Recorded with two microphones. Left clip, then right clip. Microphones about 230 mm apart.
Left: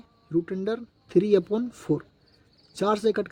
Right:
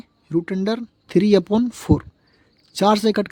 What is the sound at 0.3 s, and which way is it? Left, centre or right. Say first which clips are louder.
Speech: right 5 dB; right.